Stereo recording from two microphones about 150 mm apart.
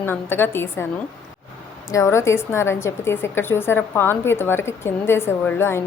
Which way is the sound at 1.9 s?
20° left (ahead or behind).